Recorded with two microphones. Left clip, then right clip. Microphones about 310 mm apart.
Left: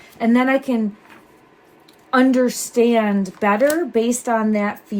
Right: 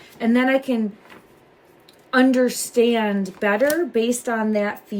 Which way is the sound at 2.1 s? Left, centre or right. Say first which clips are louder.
Left 1 dB; centre.